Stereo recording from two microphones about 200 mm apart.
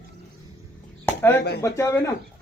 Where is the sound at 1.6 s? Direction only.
15° left (ahead or behind).